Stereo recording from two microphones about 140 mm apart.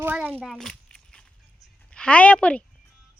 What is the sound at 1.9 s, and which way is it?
Speech, 10° left (ahead or behind).